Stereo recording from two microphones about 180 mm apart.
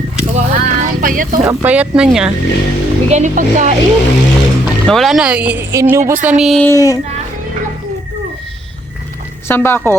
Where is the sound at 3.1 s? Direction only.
45° right (ahead or behind).